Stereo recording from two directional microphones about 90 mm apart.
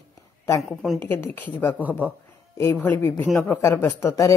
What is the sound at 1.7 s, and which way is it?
Speech, 20° right (ahead or behind).